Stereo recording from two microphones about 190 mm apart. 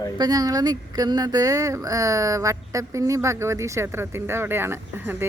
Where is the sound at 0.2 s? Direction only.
20° right (ahead or behind).